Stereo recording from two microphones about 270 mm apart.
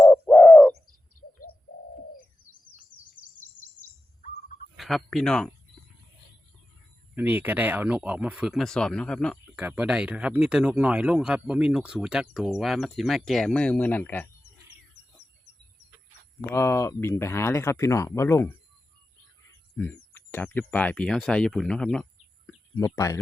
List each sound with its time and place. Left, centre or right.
0.0 s bird: centre
1.2 s bird: left
4.8 s speech: centre
7.2 s speech: centre
16.5 s speech: centre
19.7 s speech: centre
22.4 s a sound: centre